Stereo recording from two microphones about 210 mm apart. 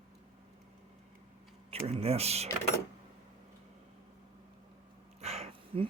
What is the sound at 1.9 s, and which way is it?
Speech, 30° right (ahead or behind).